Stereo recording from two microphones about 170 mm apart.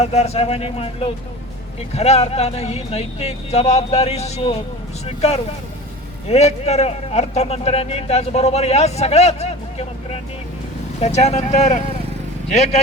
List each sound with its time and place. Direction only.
0.0 s a man's voice: 40° left (ahead or behind)